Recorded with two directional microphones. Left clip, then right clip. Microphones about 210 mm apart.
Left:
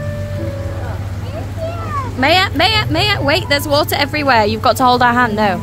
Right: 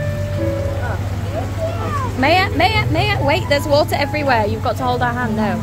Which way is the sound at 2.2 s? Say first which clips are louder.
Left 2 dB; 15° left (ahead or behind).